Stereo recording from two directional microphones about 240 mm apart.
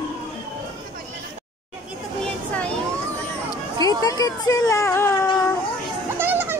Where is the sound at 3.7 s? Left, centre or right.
Centre.